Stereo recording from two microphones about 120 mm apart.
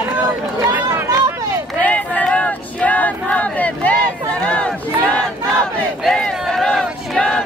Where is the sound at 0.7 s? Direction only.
20° right (ahead or behind).